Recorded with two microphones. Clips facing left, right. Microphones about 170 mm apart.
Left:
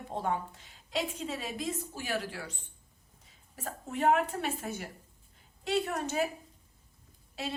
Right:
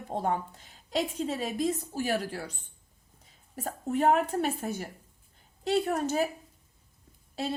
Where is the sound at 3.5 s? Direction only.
40° right (ahead or behind).